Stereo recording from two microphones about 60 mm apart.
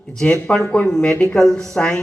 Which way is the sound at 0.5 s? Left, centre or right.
Centre.